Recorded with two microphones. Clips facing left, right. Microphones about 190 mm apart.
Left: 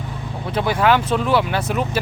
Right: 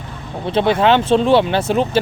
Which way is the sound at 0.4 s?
25° right (ahead or behind).